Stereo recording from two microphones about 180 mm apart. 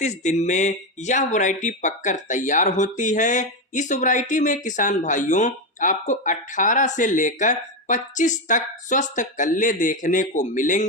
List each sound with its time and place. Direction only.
0.0 s speech: 40° left (ahead or behind)